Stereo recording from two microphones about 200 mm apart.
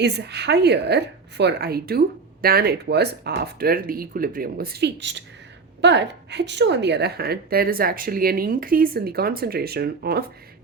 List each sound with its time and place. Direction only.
0.0 s a woman's voice: 55° right (ahead or behind)